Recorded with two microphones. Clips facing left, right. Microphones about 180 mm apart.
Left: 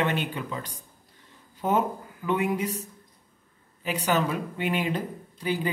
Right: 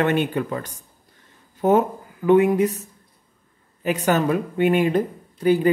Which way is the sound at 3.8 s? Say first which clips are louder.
Right 5 dB; 50° right (ahead or behind).